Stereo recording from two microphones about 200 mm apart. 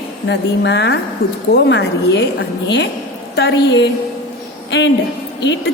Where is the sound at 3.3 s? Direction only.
60° left (ahead or behind).